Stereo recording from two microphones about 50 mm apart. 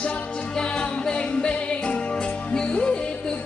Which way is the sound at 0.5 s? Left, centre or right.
Centre.